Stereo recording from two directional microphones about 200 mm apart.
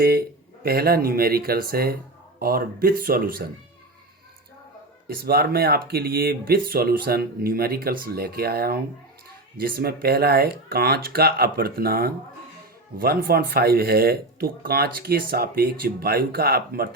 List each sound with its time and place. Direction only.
0.0 s speech: 50° right (ahead or behind)
5.0 s speech: 50° right (ahead or behind)